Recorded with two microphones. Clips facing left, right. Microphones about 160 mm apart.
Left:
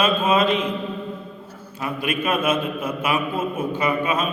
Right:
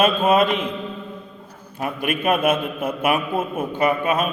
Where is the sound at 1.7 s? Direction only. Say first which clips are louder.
Right 1 dB; 45° right (ahead or behind).